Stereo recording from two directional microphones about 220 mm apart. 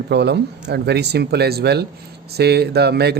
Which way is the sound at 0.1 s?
50° right (ahead or behind).